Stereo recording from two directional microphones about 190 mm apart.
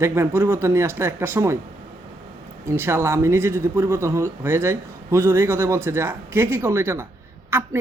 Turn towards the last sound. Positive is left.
turn(degrees=-15)  # may be behind; listen again after turning